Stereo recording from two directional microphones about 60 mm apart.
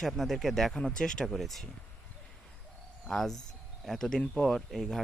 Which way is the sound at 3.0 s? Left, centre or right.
Centre.